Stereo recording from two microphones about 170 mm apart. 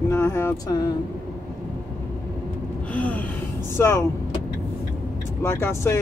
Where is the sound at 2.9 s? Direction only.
10° left (ahead or behind).